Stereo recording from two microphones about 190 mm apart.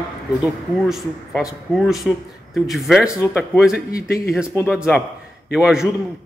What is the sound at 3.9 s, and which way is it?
Speech, 55° left (ahead or behind).